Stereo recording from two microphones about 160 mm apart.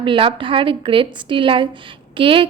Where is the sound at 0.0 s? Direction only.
30° right (ahead or behind).